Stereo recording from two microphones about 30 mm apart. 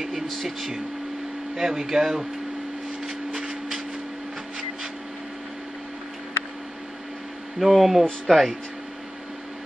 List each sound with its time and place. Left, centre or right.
0.0 s speech: centre
1.5 s speech: centre
7.5 s speech: centre